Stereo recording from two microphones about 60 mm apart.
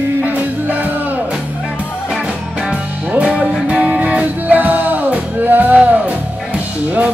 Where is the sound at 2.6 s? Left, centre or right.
Centre.